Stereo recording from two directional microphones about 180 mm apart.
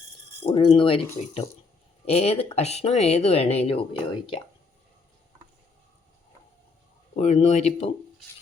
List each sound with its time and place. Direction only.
0.4 s speech: 30° left (ahead or behind)
7.2 s speech: 35° left (ahead or behind)